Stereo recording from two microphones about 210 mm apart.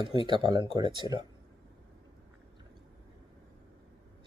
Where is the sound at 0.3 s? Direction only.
20° right (ahead or behind).